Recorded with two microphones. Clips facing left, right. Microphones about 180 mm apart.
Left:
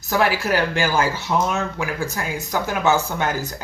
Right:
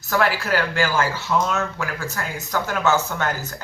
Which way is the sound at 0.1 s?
15° left (ahead or behind).